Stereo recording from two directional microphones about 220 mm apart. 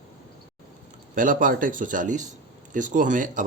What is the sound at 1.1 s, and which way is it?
Speech, 35° right (ahead or behind).